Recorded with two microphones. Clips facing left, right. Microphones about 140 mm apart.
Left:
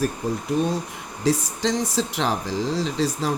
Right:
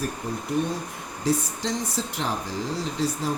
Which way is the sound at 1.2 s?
90° left.